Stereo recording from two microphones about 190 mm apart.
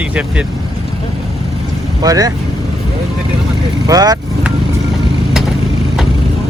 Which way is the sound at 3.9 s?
20° right (ahead or behind).